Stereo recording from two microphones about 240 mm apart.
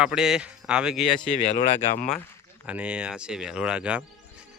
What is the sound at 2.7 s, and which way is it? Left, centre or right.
Speech, centre.